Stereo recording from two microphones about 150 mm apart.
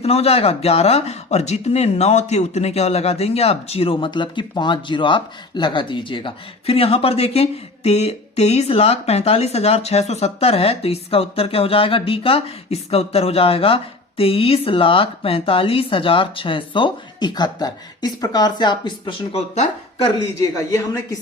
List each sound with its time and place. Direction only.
0.0 s speech: 40° left (ahead or behind)
20.4 s speech: 20° left (ahead or behind)